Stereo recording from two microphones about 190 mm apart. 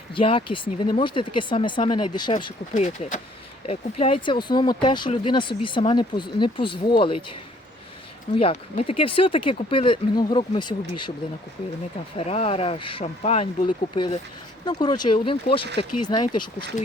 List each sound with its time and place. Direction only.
0.1 s speech: 25° left (ahead or behind)
2.3 s speech: 35° left (ahead or behind)
8.4 s speech: 30° left (ahead or behind)
12.1 s speech: 30° left (ahead or behind)